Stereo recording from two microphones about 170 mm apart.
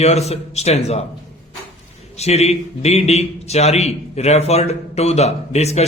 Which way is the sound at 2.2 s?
40° left (ahead or behind).